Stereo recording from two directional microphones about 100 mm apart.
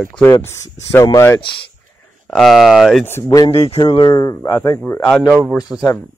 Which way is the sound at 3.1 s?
25° left (ahead or behind).